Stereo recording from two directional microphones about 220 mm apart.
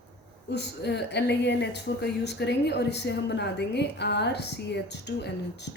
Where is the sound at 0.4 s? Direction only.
50° left (ahead or behind).